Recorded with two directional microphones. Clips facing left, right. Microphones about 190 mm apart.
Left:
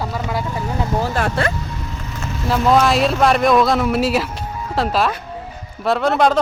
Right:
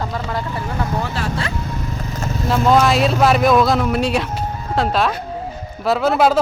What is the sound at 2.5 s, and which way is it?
Speech, centre (ahead or behind).